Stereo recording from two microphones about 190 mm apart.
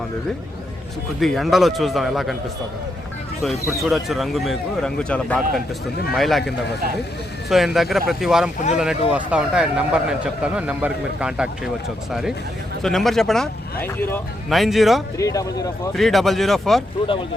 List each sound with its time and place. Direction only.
1.2 s a man's voice: centre (ahead or behind)
3.8 s a man's voice: centre (ahead or behind)
7.5 s a man's voice: centre (ahead or behind)
12.8 s a man's voice: centre (ahead or behind)
14.5 s a man's voice: centre (ahead or behind)
15.2 s speech: 20° left (ahead or behind)
15.9 s a man's voice: centre (ahead or behind)